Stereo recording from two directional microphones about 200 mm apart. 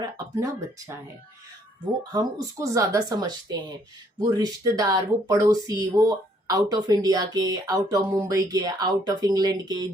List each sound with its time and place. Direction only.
0.0 s speech: 15° right (ahead or behind)
2.1 s speech: 15° right (ahead or behind)